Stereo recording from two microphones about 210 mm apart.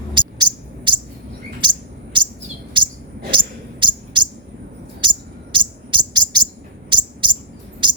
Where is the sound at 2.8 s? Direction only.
25° right (ahead or behind).